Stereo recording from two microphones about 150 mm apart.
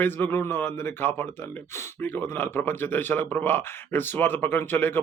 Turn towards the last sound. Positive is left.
turn(degrees=15)  # may be behind; listen again after turning